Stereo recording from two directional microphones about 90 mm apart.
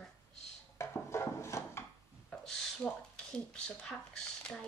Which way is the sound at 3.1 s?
10° left (ahead or behind).